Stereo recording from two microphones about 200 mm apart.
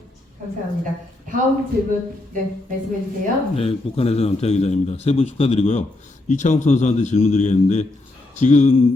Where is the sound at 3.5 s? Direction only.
30° left (ahead or behind).